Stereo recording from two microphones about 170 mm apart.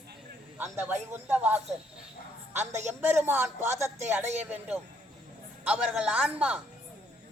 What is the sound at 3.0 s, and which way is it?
Speech, 10° right (ahead or behind).